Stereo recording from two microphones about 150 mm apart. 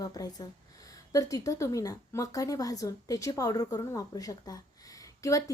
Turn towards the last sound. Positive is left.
turn(degrees=20)  # may be behind; listen again after turning